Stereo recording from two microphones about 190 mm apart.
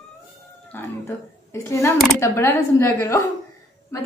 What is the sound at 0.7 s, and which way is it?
A woman's voice, 15° left (ahead or behind).